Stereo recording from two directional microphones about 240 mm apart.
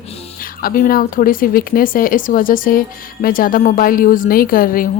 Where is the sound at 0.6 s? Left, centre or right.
Left.